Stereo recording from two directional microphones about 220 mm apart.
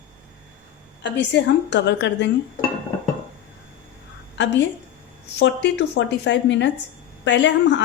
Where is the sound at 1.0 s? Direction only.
50° left (ahead or behind).